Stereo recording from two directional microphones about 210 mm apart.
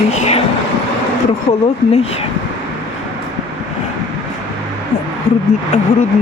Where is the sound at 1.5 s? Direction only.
30° left (ahead or behind).